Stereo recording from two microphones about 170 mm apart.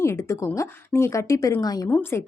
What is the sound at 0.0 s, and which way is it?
A woman's voice, 15° left (ahead or behind).